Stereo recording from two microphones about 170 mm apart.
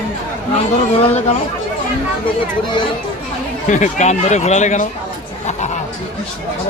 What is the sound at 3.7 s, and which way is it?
Speech, 45° left (ahead or behind).